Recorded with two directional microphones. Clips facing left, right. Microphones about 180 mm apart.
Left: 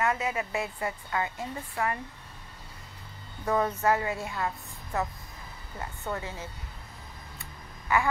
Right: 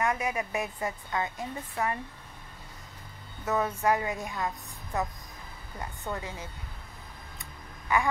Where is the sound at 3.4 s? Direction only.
10° right (ahead or behind).